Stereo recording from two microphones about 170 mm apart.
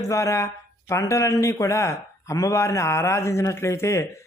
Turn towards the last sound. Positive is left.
turn(degrees=15)  # may be behind; listen again after turning